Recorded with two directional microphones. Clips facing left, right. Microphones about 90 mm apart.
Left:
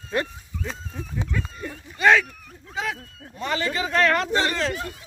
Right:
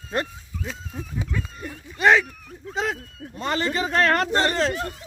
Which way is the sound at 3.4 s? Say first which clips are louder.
Right 1 dB; 40° right (ahead or behind).